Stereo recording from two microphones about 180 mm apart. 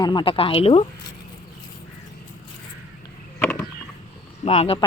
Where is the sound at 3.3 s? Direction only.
10° left (ahead or behind).